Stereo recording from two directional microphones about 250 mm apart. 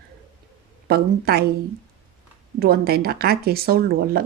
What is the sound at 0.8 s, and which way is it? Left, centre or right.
Speech, right.